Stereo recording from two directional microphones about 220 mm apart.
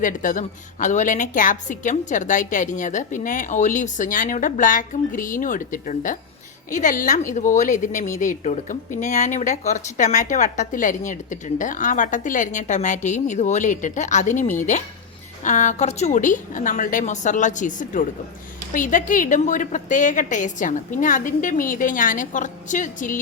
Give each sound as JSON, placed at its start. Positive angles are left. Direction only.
{"t": 0.0, "sound": "a woman's voice", "side_deg": 35}